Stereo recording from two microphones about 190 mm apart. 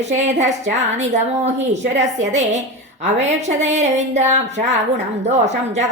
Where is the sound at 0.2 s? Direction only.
40° right (ahead or behind).